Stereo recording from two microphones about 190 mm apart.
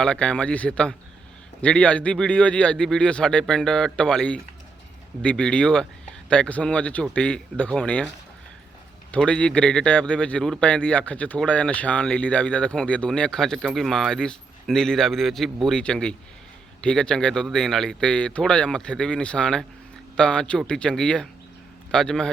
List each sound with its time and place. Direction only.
0.0 s speech: 5° left (ahead or behind)
9.1 s speech: 5° left (ahead or behind)